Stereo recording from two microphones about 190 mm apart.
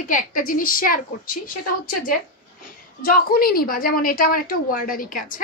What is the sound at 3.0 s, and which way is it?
A woman's voice, 50° left (ahead or behind).